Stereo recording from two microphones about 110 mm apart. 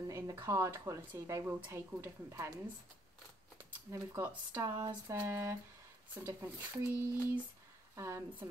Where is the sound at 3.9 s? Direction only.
25° right (ahead or behind).